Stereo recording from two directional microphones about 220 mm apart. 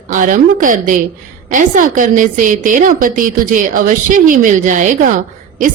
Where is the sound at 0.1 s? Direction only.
35° right (ahead or behind).